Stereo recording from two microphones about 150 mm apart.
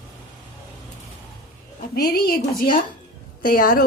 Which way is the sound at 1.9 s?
85° left.